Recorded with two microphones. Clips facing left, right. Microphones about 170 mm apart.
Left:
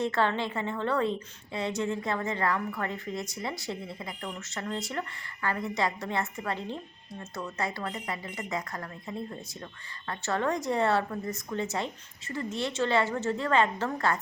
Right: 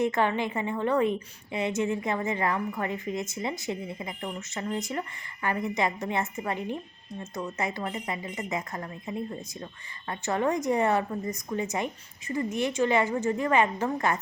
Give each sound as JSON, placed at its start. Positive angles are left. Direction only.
{"t": 0.0, "sound": "a woman's voice", "side_deg": -15}